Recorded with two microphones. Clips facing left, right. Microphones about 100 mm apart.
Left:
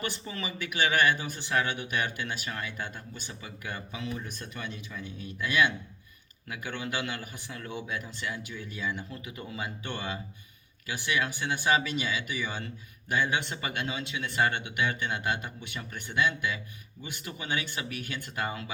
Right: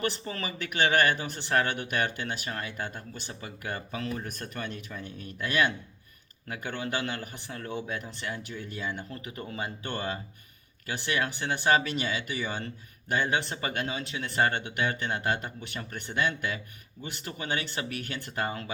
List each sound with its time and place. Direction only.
0.0 s speech: 45° right (ahead or behind)